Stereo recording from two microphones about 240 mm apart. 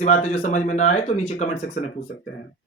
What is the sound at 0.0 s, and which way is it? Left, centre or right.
Speech, left.